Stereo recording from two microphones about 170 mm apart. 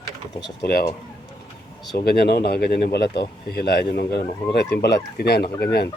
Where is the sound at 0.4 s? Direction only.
65° left (ahead or behind).